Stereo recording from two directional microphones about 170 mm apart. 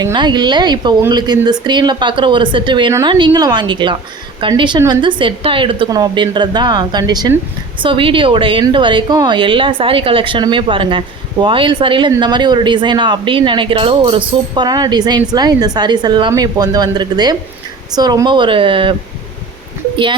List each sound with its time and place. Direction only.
0.0 s a woman's voice: 25° right (ahead or behind)